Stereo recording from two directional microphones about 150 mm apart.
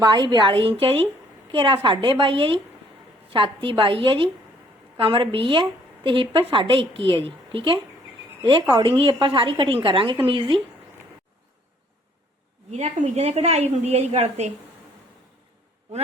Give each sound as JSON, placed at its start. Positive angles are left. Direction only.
{"t": 0.0, "sound": "a woman's voice", "side_deg": -30}
{"t": 12.7, "sound": "a woman's voice", "side_deg": -50}